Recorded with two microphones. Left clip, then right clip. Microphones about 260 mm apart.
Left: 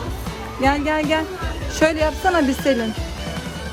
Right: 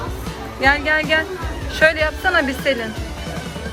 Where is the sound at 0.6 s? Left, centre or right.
Left.